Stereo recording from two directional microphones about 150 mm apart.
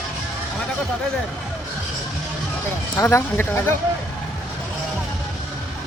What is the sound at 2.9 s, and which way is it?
Speech, 15° left (ahead or behind).